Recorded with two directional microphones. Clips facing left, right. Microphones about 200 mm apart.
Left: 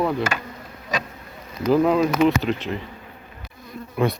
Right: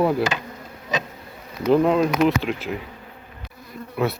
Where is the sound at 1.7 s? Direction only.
Centre (ahead or behind).